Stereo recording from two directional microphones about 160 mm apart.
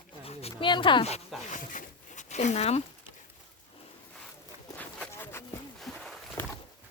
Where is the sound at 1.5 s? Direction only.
50° left (ahead or behind).